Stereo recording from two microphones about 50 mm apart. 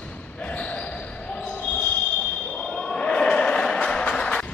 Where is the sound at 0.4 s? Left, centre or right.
Left.